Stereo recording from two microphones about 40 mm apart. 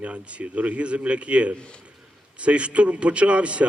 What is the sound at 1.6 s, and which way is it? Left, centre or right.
Speech, left.